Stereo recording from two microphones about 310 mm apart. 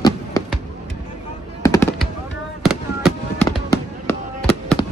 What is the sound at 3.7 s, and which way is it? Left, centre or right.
Fireworks, centre.